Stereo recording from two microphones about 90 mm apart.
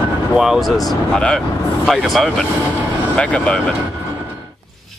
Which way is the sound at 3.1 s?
10° left (ahead or behind).